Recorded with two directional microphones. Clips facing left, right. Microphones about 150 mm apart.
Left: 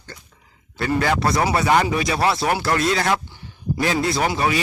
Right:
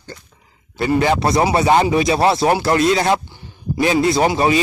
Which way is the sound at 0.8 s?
20° right (ahead or behind).